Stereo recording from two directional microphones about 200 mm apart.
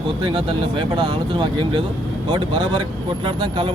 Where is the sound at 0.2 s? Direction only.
25° right (ahead or behind).